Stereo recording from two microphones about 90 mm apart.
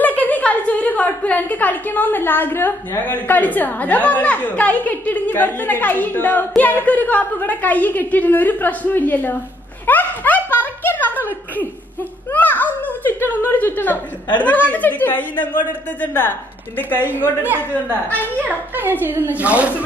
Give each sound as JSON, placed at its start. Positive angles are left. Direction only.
{"t": 0.0, "sound": "a woman's voice", "side_deg": 20}
{"t": 18.4, "sound": "speech", "side_deg": -20}